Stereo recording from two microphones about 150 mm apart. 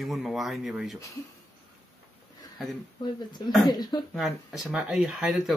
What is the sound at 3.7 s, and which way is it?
Speech, 30° left (ahead or behind).